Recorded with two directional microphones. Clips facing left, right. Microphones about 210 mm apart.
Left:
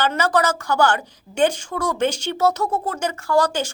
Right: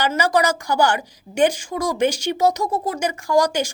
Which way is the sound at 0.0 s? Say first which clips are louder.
Right 1 dB; 10° right (ahead or behind).